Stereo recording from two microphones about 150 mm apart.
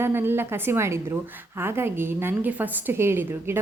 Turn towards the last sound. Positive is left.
turn(degrees=-15)  # may be behind; listen again after turning